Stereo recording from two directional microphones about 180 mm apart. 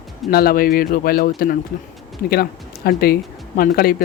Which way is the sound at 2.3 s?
60° left (ahead or behind).